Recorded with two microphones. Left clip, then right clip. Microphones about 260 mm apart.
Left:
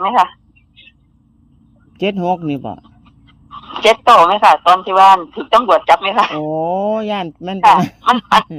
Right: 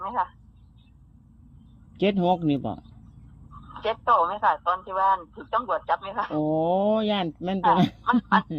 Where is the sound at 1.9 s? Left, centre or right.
Left.